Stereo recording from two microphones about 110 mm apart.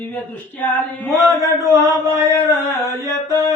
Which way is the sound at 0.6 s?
15° left (ahead or behind).